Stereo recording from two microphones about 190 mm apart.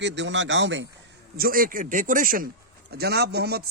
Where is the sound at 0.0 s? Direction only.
70° right (ahead or behind).